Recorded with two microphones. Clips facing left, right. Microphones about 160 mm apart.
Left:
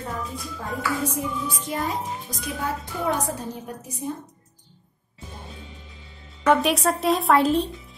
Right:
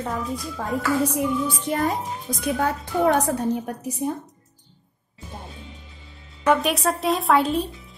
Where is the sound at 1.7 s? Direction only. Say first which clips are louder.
Right 4 dB; 55° right (ahead or behind).